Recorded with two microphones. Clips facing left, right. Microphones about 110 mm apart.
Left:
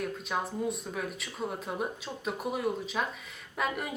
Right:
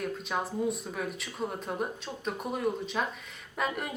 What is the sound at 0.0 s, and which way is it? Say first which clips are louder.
A woman's voice: even; centre (ahead or behind).